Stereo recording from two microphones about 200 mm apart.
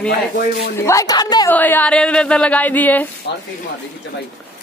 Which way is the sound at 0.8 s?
15° left (ahead or behind).